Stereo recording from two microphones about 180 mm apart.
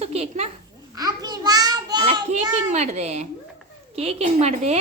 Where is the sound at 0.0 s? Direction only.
35° right (ahead or behind).